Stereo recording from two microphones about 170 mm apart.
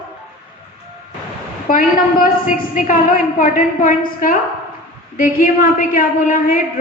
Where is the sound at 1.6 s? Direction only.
55° left (ahead or behind).